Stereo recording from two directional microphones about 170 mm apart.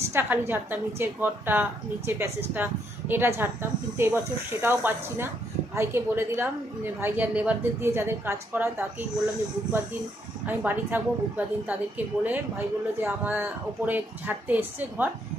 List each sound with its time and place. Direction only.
0.1 s a woman's voice: 15° right (ahead or behind)
10.4 s a woman's voice: 10° right (ahead or behind)